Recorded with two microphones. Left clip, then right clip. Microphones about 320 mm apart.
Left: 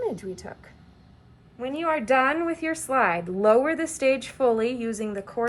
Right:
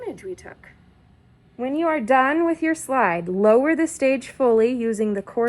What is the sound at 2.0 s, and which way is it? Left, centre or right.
Speech, centre.